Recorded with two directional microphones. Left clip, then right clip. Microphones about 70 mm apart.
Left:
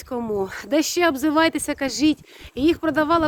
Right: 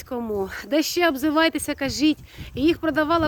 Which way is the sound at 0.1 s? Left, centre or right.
Left.